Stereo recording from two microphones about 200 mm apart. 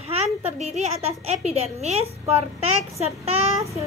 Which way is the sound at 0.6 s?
35° right (ahead or behind).